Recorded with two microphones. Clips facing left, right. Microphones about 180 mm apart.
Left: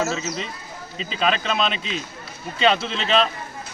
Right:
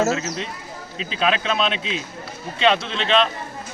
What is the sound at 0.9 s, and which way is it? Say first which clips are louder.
A man's voice: right 1 dB; centre (ahead or behind).